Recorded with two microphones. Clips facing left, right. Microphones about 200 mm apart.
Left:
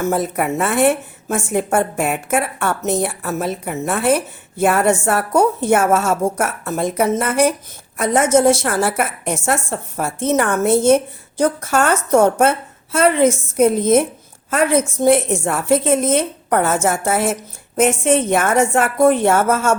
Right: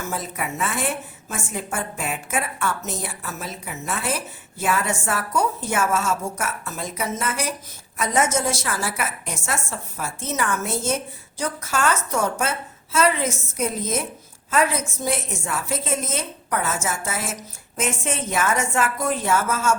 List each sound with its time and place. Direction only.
0.0 s a woman's voice: 55° left (ahead or behind)